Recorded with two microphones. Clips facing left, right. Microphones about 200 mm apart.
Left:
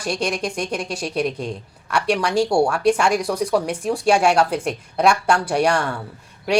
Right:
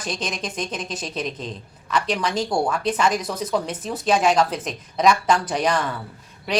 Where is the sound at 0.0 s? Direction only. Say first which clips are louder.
Left 5 dB; 10° left (ahead or behind).